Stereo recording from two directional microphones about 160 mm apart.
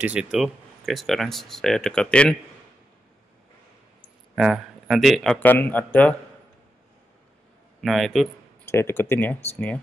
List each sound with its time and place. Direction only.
0.0 s speech: 5° right (ahead or behind)
4.4 s speech: centre (ahead or behind)
7.8 s speech: centre (ahead or behind)
8.7 s speech: 15° left (ahead or behind)